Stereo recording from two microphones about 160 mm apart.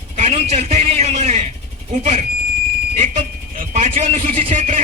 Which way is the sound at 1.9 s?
45° right (ahead or behind).